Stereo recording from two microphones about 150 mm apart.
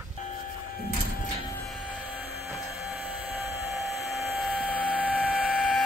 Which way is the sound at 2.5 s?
Centre (ahead or behind).